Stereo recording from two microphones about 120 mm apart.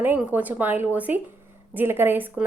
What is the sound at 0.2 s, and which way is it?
Speech, 10° right (ahead or behind).